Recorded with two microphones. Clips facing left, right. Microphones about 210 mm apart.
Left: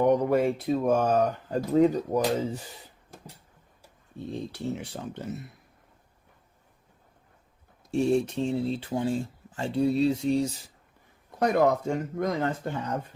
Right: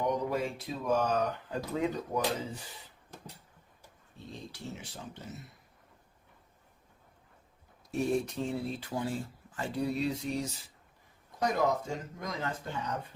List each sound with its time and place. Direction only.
0.0 s speech: 60° left (ahead or behind); by 2.2 s 40° left (ahead or behind)
4.3 s speech: 60° left (ahead or behind)
7.9 s speech: 30° left (ahead or behind)
11.3 s speech: 60° left (ahead or behind)